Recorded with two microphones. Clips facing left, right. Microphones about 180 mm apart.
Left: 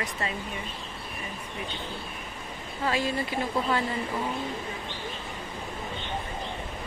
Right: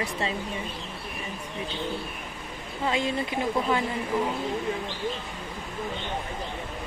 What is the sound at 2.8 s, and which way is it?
Speech, 20° right (ahead or behind).